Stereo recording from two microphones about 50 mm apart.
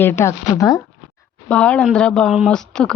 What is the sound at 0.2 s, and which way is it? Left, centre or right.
Speech, left.